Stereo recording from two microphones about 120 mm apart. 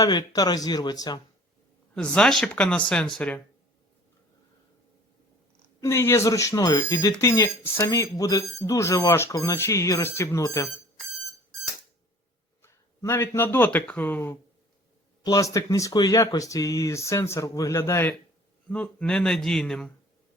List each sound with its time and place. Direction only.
0.0 s speech: 30° left (ahead or behind)
2.1 s speech: 5° left (ahead or behind)
5.8 s speech: 20° left (ahead or behind)
12.6 s speech: 20° left (ahead or behind)
15.2 s speech: 30° left (ahead or behind)
18.7 s speech: 10° left (ahead or behind)